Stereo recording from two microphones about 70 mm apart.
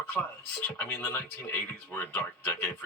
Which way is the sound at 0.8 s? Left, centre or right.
Left.